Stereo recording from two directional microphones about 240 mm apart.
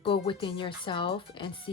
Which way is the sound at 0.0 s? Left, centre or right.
Left.